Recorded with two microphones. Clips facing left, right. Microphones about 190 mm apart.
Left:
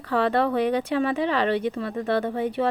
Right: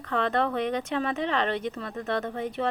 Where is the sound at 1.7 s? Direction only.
30° left (ahead or behind).